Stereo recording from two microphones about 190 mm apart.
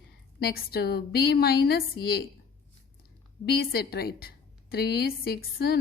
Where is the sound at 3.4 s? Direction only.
55° left (ahead or behind).